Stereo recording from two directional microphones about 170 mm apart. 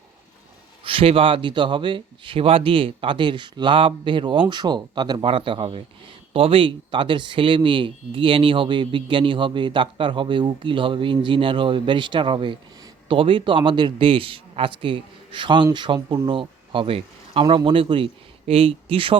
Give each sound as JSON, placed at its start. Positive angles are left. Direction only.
{"t": 0.9, "sound": "speech", "side_deg": -30}